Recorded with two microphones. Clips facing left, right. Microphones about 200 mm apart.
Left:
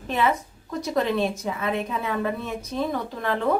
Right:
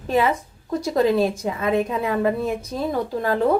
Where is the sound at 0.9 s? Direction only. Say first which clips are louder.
Right 5 dB; 30° right (ahead or behind).